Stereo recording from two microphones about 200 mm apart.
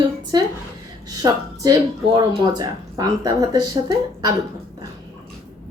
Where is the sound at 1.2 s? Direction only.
20° right (ahead or behind).